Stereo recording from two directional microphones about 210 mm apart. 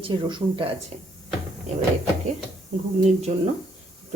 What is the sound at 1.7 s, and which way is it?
Cupboard open or close, 30° right (ahead or behind).